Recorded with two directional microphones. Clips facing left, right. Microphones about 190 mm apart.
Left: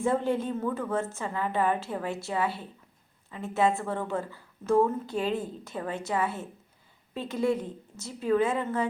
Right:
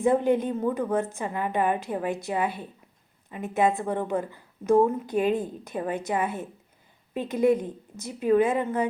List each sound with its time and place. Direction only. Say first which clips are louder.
0.0 s a woman's voice: right 5 dB; 15° right (ahead or behind)